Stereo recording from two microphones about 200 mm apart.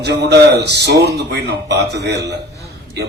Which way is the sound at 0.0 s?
60° right (ahead or behind).